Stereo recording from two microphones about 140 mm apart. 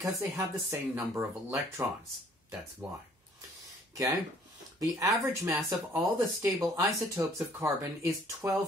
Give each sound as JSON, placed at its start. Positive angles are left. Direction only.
{"t": 0.0, "sound": "speech", "side_deg": -20}
{"t": 3.9, "sound": "speech", "side_deg": -25}